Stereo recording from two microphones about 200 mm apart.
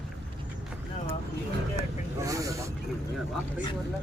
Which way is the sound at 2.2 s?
15° right (ahead or behind).